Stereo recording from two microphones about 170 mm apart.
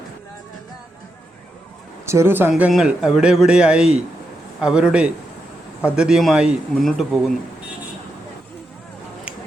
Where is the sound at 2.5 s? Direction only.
Centre (ahead or behind).